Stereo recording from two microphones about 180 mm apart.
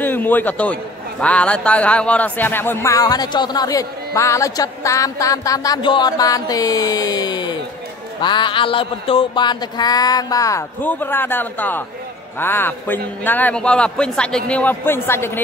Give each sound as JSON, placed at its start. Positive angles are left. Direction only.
{"t": 0.0, "sound": "a man's voice", "side_deg": 10}